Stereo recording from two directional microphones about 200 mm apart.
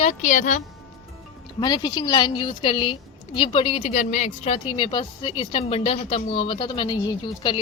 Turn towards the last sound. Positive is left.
turn(degrees=20)  # may be behind; listen again after turning